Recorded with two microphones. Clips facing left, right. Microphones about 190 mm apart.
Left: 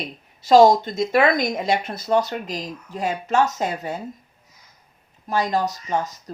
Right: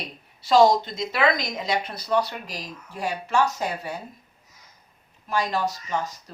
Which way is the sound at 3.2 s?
20° left (ahead or behind).